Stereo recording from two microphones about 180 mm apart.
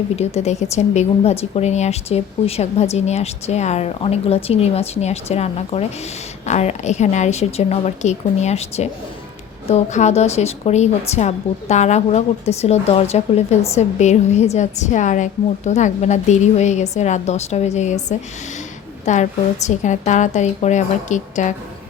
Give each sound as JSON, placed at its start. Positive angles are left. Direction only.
{"t": 0.2, "sound": "speech", "side_deg": 35}